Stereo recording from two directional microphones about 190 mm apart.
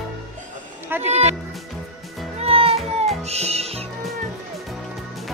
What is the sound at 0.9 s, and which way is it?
Speech, 10° right (ahead or behind).